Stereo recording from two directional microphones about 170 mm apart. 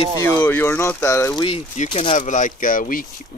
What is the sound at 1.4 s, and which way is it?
Speech, 40° left (ahead or behind).